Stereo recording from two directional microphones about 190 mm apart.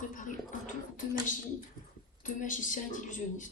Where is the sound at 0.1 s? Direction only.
45° left (ahead or behind).